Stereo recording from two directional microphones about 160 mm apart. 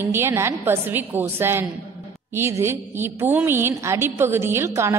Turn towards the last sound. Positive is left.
turn(degrees=-15)  # may be behind; listen again after turning